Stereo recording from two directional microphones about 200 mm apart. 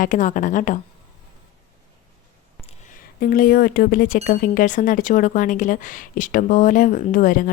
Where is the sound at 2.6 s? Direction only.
35° left (ahead or behind).